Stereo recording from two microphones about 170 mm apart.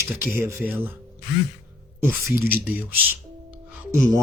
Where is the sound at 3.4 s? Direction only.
15° right (ahead or behind).